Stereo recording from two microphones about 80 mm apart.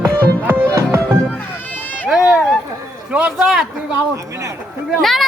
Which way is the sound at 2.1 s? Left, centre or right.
Centre.